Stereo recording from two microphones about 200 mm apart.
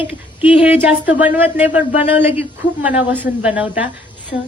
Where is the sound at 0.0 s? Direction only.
10° right (ahead or behind).